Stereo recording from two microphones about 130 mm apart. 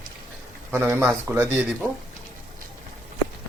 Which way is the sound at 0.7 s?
20° right (ahead or behind).